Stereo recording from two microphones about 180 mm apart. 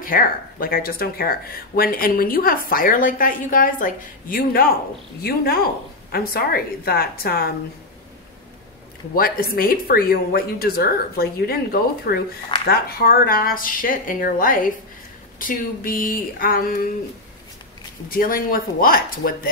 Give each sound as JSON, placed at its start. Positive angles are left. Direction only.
{"t": 0.0, "sound": "speech", "side_deg": 50}
{"t": 9.1, "sound": "speech", "side_deg": 55}
{"t": 18.0, "sound": "speech", "side_deg": 50}